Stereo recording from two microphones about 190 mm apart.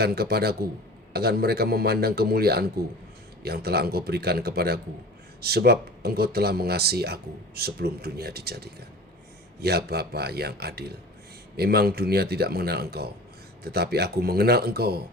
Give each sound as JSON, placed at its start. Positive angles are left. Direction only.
{"t": 0.0, "sound": "speech", "side_deg": -55}